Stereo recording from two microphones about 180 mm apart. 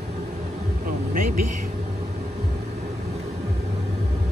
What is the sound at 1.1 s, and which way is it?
Vehicle, 50° right (ahead or behind).